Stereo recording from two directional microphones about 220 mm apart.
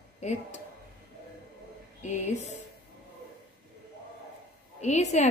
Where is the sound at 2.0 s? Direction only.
30° left (ahead or behind).